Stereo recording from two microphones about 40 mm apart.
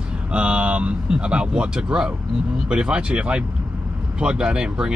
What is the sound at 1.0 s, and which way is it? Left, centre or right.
Speech, right.